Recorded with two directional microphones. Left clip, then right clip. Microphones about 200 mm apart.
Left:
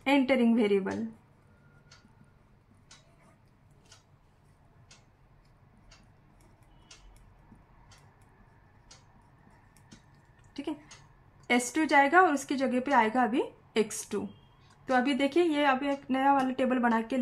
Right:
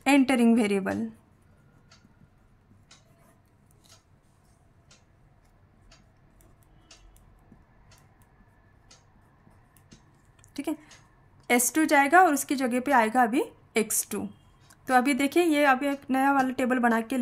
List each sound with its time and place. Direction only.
0.0 s a woman's voice: 40° right (ahead or behind)
10.5 s a sound: 35° right (ahead or behind)
11.4 s a woman's voice: 30° right (ahead or behind)